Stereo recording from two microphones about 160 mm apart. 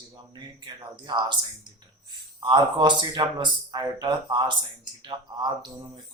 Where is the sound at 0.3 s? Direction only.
30° right (ahead or behind).